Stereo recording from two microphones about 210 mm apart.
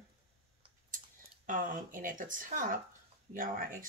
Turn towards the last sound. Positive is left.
turn(degrees=-40)  # may be behind; listen again after turning